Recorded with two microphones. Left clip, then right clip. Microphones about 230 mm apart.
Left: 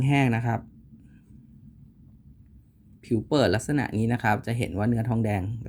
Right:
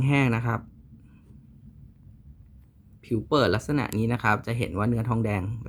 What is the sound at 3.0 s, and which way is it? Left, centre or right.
Speech, centre.